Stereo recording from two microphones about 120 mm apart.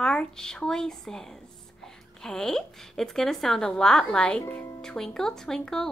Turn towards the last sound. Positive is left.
turn(degrees=5)  # may be behind; listen again after turning